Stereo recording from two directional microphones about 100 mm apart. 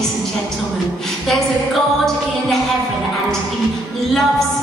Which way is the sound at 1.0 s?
5° left (ahead or behind).